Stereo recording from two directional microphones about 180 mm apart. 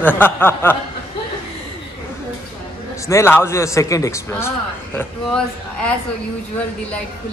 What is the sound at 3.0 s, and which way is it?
A man's voice, 15° left (ahead or behind).